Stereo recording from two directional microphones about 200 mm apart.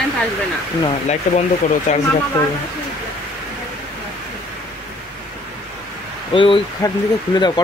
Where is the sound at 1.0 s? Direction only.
35° left (ahead or behind).